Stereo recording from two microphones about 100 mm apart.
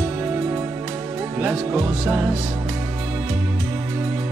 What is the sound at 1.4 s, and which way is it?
Speech, 15° right (ahead or behind).